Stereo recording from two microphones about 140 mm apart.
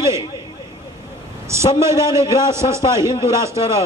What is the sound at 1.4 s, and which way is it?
A man's voice, 20° right (ahead or behind).